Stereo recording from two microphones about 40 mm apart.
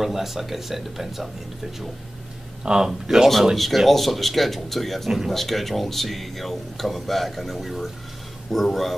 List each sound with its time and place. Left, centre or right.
0.0 s speech: centre
2.6 s speech: centre
3.1 s speech: centre